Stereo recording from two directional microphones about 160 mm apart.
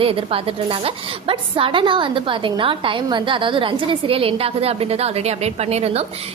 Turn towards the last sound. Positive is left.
turn(degrees=-40)  # may be behind; listen again after turning